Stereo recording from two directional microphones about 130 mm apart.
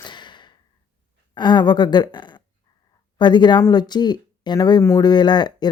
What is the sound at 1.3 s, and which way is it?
Speech, 35° left (ahead or behind).